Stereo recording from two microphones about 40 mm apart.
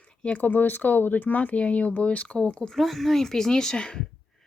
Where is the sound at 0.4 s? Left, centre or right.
Left.